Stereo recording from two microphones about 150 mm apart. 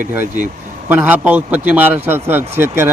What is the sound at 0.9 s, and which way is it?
A man's voice, 10° right (ahead or behind).